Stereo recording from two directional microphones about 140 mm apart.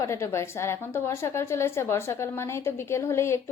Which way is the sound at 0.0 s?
20° left (ahead or behind).